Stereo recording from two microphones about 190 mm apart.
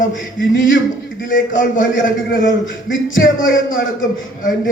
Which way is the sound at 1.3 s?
45° left (ahead or behind).